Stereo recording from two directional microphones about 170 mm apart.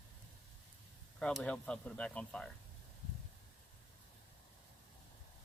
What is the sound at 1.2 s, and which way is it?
Speech, 5° left (ahead or behind).